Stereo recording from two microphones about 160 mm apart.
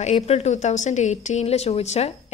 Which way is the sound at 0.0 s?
45° left (ahead or behind).